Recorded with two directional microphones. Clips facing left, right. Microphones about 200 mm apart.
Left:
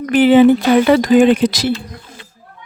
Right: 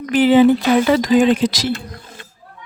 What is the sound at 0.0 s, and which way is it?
Speech, 60° left (ahead or behind).